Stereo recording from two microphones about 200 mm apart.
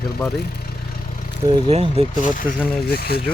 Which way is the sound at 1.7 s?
30° right (ahead or behind).